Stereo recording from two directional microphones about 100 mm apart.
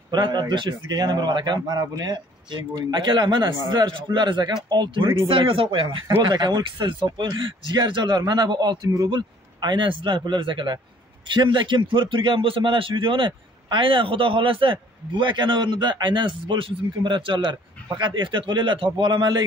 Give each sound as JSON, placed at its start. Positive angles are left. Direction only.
{"t": 0.1, "sound": "a man's voice", "side_deg": -45}